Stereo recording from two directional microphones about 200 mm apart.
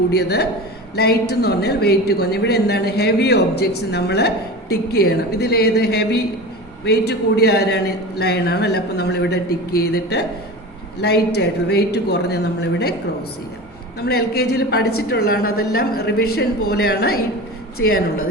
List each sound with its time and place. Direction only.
0.1 s a man's voice: 55° left (ahead or behind)
14.0 s a man's voice: 50° left (ahead or behind)